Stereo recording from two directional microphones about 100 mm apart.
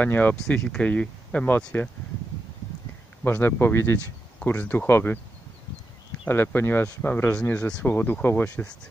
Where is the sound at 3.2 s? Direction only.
20° left (ahead or behind).